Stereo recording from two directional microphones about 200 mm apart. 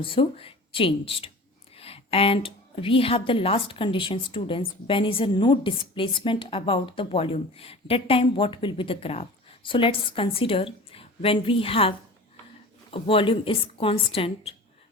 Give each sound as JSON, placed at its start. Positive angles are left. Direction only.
{"t": 0.0, "sound": "a woman's voice", "side_deg": 25}